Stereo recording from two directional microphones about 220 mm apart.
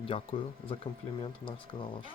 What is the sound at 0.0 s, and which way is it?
Speech, 25° left (ahead or behind).